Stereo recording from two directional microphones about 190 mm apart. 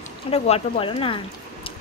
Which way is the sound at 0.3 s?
30° left (ahead or behind).